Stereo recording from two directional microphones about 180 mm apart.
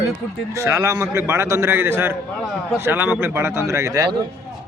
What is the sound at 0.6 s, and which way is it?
A man's voice, 15° right (ahead or behind).